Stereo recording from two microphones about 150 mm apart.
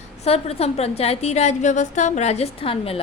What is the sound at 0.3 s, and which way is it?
Speech, 40° left (ahead or behind).